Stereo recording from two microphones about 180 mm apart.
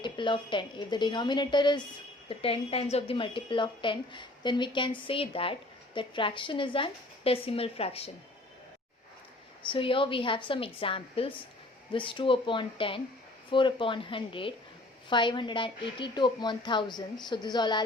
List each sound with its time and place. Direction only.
0.0 s a woman's voice: 25° left (ahead or behind)
9.6 s a woman's voice: 30° left (ahead or behind)